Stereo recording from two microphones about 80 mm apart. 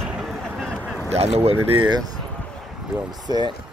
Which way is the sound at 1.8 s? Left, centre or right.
Right.